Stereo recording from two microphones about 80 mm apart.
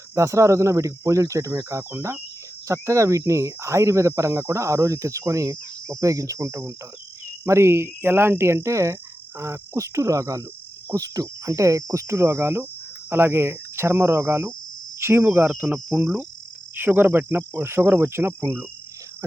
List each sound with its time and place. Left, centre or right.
0.1 s speech: right
15.6 s cricket: centre
16.7 s cricket: right